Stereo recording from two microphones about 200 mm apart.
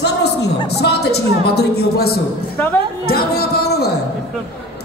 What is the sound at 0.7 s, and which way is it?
A woman's voice, 55° left (ahead or behind).